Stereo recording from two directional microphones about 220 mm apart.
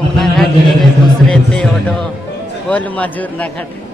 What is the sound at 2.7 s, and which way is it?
Speech, 5° left (ahead or behind).